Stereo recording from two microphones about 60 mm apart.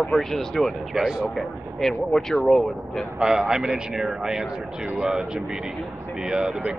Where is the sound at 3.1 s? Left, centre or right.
Centre.